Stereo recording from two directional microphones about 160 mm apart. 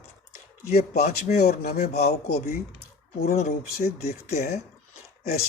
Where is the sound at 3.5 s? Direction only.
70° left (ahead or behind).